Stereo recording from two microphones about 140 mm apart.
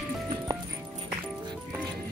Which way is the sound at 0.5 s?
30° right (ahead or behind).